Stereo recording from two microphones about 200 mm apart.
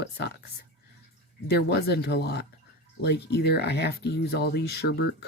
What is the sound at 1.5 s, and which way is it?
Speech, 55° left (ahead or behind).